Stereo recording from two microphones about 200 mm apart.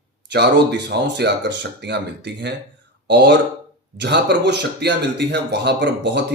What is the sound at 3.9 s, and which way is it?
Speech, 60° right (ahead or behind).